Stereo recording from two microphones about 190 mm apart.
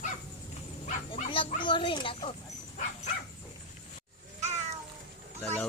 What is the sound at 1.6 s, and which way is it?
Speech, 25° left (ahead or behind).